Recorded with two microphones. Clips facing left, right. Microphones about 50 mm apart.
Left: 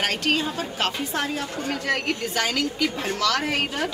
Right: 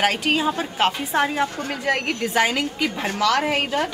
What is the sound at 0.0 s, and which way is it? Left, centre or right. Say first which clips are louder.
A woman's voice: right 4 dB; centre.